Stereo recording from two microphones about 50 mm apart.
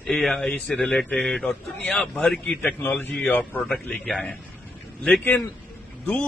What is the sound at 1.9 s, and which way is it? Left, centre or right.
Speech, centre.